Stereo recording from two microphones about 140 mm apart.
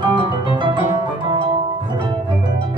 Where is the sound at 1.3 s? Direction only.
35° right (ahead or behind).